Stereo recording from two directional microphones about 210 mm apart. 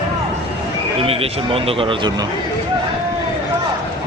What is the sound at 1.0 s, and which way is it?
A man's voice, 30° right (ahead or behind).